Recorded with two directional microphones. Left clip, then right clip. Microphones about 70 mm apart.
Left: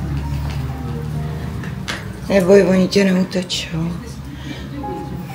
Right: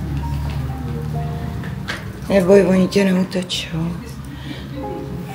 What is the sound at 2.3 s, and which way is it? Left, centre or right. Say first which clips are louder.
Speech: left 1 dB; left.